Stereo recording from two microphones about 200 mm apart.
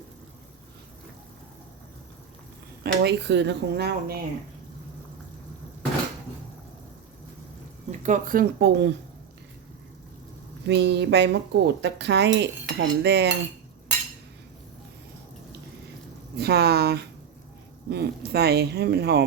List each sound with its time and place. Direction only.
2.8 s a woman's voice: 55° right (ahead or behind)
7.9 s speech: 40° right (ahead or behind); by 8.9 s 60° right (ahead or behind)
10.7 s a woman's voice: 60° right (ahead or behind)
16.4 s a woman's voice: 55° right (ahead or behind)